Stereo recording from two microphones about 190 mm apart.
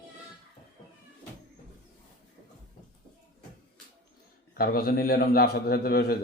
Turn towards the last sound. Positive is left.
turn(degrees=55)  # may be behind; listen again after turning